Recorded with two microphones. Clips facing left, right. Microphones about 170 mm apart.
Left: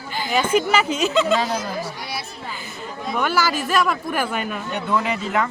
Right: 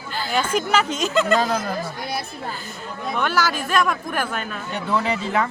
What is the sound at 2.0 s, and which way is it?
Music, 50° right (ahead or behind).